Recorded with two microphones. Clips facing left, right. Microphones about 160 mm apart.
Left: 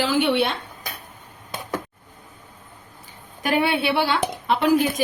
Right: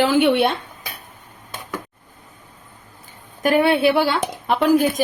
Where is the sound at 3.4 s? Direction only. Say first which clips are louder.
Right 6 dB; 50° right (ahead or behind).